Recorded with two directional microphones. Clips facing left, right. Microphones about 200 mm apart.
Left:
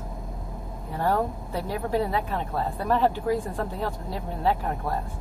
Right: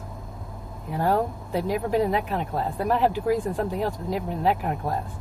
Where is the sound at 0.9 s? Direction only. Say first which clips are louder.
Right 2 dB; 15° right (ahead or behind).